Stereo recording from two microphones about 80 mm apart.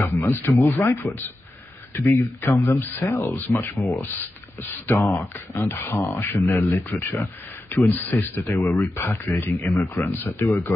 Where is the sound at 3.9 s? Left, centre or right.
Left.